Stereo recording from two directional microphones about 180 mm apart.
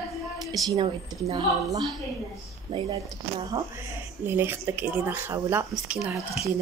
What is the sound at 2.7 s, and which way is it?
A woman's voice, 25° right (ahead or behind).